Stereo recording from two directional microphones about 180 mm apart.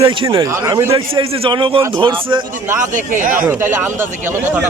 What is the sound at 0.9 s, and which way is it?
A man's voice, 30° right (ahead or behind).